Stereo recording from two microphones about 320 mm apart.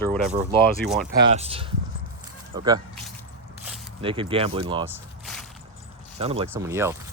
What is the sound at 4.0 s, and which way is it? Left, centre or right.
Speech, centre.